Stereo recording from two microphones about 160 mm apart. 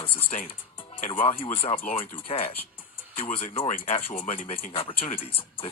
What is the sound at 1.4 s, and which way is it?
Speech, 35° left (ahead or behind).